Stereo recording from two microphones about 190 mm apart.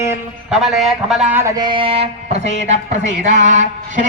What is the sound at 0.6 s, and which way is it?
Speech, centre (ahead or behind).